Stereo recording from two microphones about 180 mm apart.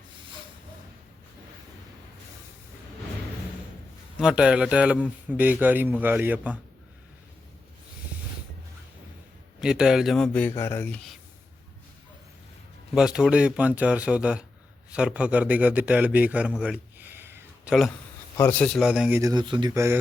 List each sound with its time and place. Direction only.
4.2 s a man's voice: 5° right (ahead or behind)
9.6 s speech: 5° right (ahead or behind); by 11.0 s 10° left (ahead or behind)
12.9 s a man's voice: 5° right (ahead or behind)
16.5 s a sound: 5° right (ahead or behind)
18.3 s speech: 10° left (ahead or behind)
18.8 s speech: 5° right (ahead or behind)
19.2 s speech: 25° right (ahead or behind)